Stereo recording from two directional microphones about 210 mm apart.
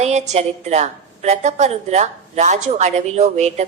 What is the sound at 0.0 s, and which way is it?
A woman's voice, 30° right (ahead or behind).